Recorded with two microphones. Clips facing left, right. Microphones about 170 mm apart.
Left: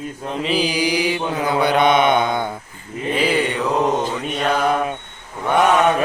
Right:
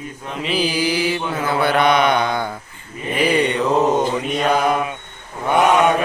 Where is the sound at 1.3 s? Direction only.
15° left (ahead or behind).